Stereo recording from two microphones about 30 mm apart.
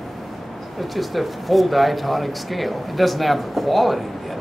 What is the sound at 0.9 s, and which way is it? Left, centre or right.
Speech, centre.